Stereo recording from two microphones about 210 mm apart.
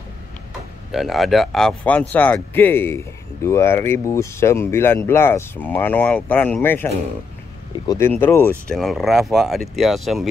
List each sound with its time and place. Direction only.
0.9 s speech: centre (ahead or behind)